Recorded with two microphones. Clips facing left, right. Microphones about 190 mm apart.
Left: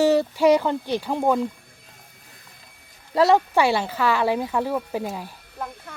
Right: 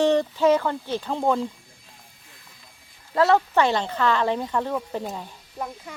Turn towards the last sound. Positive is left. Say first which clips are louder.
# right 1 dB
turn(degrees=-15)  # may be behind; listen again after turning